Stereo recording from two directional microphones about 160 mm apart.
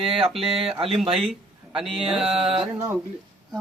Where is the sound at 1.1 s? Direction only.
Centre (ahead or behind).